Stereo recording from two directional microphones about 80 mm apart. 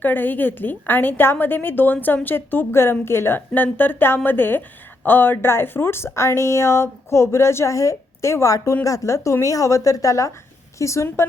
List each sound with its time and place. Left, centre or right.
0.0 s a woman's voice: left